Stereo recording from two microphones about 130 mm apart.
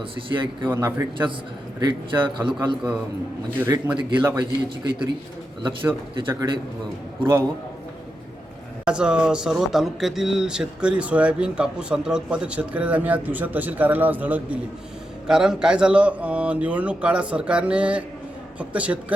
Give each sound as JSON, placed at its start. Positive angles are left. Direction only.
{"t": 0.3, "sound": "a man's voice", "side_deg": -40}
{"t": 0.7, "sound": "a man's voice", "side_deg": -20}
{"t": 1.8, "sound": "a man's voice", "side_deg": -35}
{"t": 3.9, "sound": "a man's voice", "side_deg": -35}
{"t": 6.1, "sound": "a man's voice", "side_deg": -35}
{"t": 7.2, "sound": "a man's voice", "side_deg": -20}
{"t": 8.8, "sound": "speech", "side_deg": -5}